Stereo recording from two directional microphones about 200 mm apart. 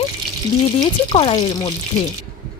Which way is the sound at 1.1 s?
25° left (ahead or behind).